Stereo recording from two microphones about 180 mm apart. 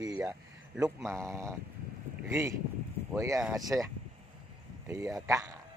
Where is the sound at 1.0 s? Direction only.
15° right (ahead or behind).